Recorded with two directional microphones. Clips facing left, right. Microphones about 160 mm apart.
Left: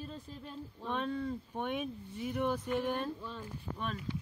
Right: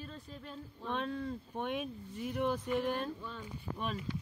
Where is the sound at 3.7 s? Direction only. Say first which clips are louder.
Right 1 dB; 10° right (ahead or behind).